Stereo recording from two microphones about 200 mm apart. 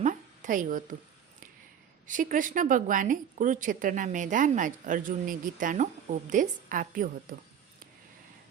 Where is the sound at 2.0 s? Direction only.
40° right (ahead or behind).